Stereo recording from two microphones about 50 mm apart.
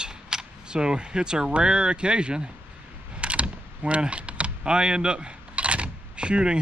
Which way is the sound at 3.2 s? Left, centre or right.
Right.